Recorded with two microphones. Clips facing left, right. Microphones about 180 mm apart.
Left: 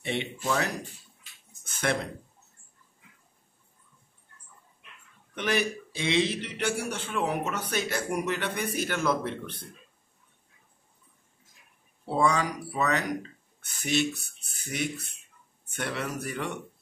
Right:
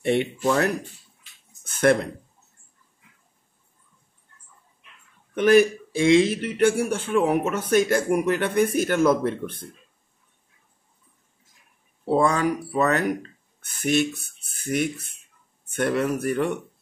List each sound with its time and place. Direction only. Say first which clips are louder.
0.0 s speech: right 10 dB; 55° right (ahead or behind)
1.7 s a sound: right 10 dB; 55° right (ahead or behind)
5.3 s a man's voice: right 12 dB; 50° right (ahead or behind)
12.2 s a man's voice: right 3 dB; 50° right (ahead or behind)